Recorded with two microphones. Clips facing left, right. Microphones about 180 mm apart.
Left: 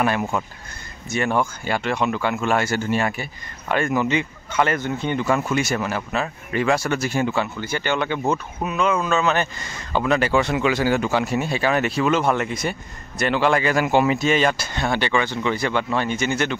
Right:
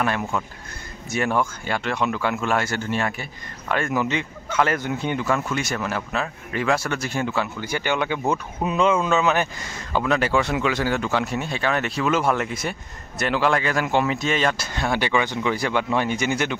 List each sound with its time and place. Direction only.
0.0 s speech: 5° left (ahead or behind)
1.1 s speech: centre (ahead or behind)
5.3 s speech: 5° left (ahead or behind)
7.6 s speech: 10° right (ahead or behind)
8.6 s speech: 30° right (ahead or behind)
9.0 s speech: 15° right (ahead or behind)
9.9 s speech: centre (ahead or behind)